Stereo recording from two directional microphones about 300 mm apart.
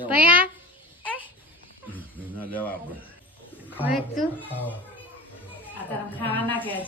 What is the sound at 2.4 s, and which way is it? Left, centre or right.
Speech, centre.